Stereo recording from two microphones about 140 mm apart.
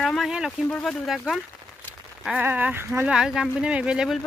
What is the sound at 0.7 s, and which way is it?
Speech, 5° left (ahead or behind).